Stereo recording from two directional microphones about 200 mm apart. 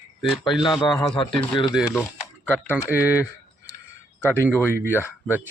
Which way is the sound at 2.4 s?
10° left (ahead or behind).